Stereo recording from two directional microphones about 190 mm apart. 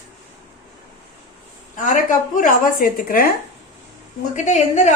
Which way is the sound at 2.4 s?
50° left (ahead or behind).